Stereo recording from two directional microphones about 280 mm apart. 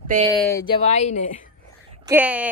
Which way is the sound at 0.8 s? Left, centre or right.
Left.